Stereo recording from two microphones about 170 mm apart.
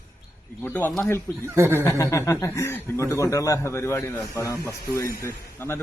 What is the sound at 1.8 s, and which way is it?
Speech, 15° left (ahead or behind).